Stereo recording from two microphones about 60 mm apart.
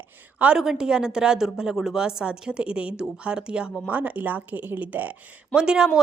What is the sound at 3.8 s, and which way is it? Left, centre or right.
A woman's voice, right.